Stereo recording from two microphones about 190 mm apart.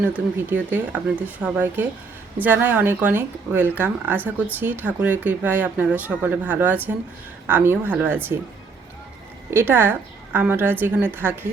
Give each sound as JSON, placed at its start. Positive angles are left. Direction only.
{"t": 0.0, "sound": "speech", "side_deg": -10}
{"t": 9.5, "sound": "speech", "side_deg": -10}